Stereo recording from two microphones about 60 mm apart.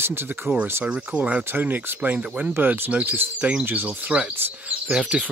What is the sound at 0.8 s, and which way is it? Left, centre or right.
Speech, right.